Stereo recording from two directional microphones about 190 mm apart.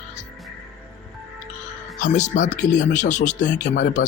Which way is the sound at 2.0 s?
40° left (ahead or behind).